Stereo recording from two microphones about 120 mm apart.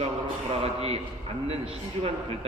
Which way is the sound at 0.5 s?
55° right (ahead or behind).